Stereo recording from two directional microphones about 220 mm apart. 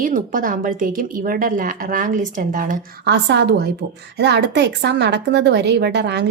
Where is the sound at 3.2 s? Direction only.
50° right (ahead or behind).